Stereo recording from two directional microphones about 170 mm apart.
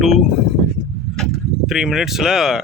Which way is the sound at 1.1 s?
Centre (ahead or behind).